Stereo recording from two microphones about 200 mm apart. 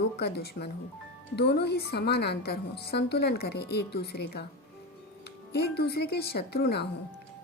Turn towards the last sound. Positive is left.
turn(degrees=55)  # may be behind; listen again after turning